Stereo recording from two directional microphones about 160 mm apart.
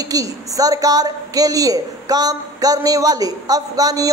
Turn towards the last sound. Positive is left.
turn(degrees=-20)  # may be behind; listen again after turning